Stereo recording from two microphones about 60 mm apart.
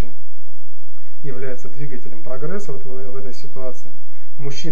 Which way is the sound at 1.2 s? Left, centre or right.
Right.